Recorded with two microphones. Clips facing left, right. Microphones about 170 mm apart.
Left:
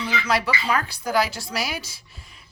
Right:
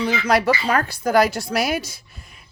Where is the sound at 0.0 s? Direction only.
45° right (ahead or behind).